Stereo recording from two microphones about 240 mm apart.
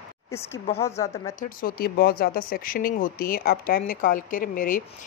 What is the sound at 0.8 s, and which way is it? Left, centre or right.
Speech, centre.